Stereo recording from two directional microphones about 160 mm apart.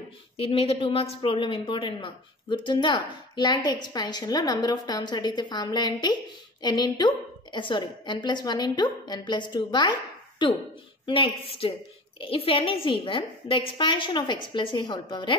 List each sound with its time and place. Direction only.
0.4 s a woman's voice: 35° left (ahead or behind)